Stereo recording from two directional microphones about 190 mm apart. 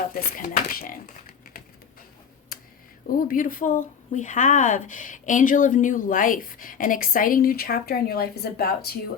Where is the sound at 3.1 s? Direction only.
45° left (ahead or behind).